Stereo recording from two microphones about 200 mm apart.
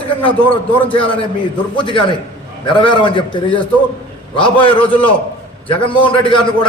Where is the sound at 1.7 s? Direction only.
25° left (ahead or behind).